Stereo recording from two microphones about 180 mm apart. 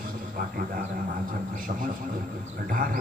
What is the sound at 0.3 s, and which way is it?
Speech, 50° right (ahead or behind).